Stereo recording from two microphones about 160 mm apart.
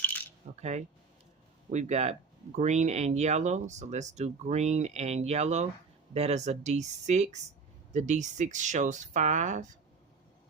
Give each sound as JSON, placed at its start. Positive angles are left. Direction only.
{"t": 0.0, "sound": "coin", "side_deg": 10}
{"t": 0.5, "sound": "speech", "side_deg": -45}